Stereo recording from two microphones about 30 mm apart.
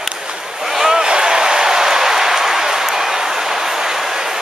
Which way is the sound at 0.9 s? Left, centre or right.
Right.